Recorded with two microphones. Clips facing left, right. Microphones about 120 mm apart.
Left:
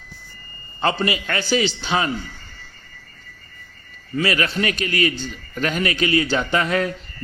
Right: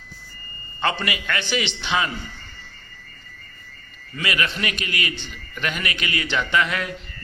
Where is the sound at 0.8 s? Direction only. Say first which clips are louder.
Left 4 dB; 35° left (ahead or behind).